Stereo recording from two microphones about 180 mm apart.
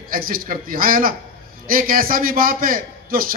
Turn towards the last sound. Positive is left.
turn(degrees=-50)  # may be behind; listen again after turning